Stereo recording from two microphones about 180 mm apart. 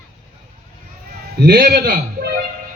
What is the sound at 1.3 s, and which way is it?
A man's voice, 65° right (ahead or behind).